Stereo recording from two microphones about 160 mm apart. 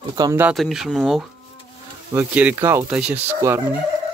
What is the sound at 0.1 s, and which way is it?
Speech, 25° right (ahead or behind).